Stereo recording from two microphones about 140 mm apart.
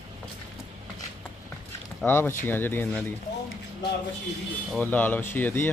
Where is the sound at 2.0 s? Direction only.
15° left (ahead or behind).